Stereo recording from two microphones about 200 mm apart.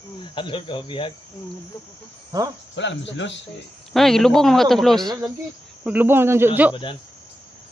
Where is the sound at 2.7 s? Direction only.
65° left (ahead or behind).